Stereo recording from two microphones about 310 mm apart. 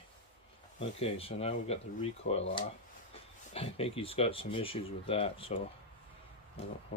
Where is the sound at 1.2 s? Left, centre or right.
Centre.